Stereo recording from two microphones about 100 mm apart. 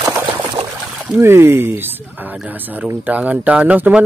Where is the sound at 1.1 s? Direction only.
25° right (ahead or behind).